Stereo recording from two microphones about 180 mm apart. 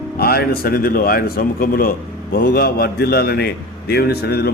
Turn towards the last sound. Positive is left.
turn(degrees=60)  # may be behind; listen again after turning